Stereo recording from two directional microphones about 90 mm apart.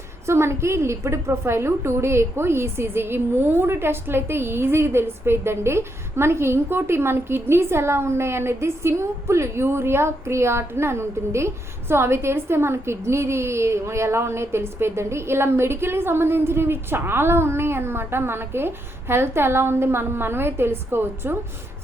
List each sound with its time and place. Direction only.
0.3 s a woman's voice: 30° right (ahead or behind)